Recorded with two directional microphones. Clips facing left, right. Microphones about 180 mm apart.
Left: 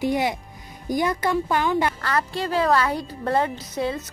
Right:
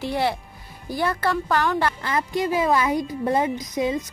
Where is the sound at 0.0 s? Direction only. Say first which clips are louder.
Left 1 dB; 15° left (ahead or behind).